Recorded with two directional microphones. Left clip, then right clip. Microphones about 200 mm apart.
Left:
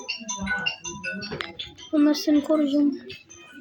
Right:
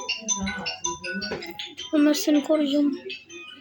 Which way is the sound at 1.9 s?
Centre (ahead or behind).